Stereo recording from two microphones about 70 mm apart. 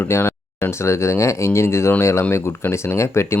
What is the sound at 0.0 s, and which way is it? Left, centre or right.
Speech, left.